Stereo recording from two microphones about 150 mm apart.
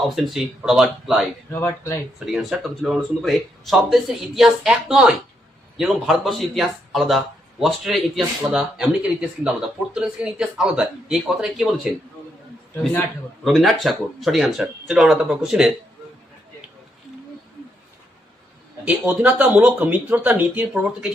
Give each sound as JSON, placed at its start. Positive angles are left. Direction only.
{"t": 0.0, "sound": "speech", "side_deg": 0}
{"t": 1.5, "sound": "speech", "side_deg": 20}
{"t": 2.1, "sound": "speech", "side_deg": 0}
{"t": 13.4, "sound": "speech", "side_deg": 0}
{"t": 18.9, "sound": "speech", "side_deg": -10}